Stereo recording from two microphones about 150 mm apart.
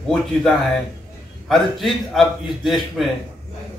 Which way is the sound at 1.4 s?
Centre (ahead or behind).